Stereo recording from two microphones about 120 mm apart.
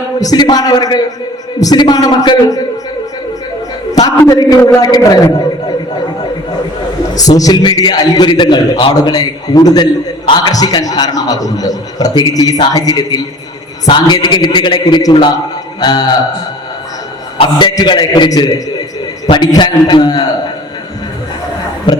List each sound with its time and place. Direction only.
0.2 s a man's voice: 35° left (ahead or behind)
4.3 s a man's voice: 30° left (ahead or behind)
7.2 s a man's voice: 30° left (ahead or behind)
17.4 s a man's voice: 40° left (ahead or behind)